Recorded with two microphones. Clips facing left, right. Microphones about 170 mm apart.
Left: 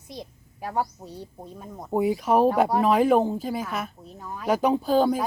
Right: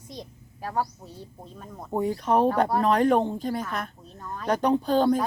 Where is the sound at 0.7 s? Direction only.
10° left (ahead or behind).